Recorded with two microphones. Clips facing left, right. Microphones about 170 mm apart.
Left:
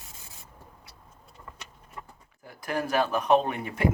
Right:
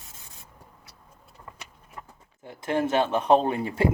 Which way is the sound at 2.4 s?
25° right (ahead or behind).